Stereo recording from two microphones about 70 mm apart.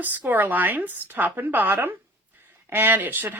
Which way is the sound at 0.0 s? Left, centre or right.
Right.